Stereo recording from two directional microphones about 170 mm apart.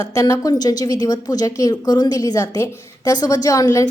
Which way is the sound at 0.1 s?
20° left (ahead or behind).